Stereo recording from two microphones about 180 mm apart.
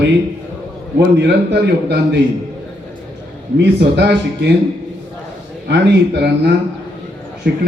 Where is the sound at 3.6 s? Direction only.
70° right (ahead or behind).